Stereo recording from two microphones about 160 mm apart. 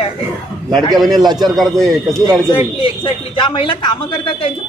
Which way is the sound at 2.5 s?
35° left (ahead or behind).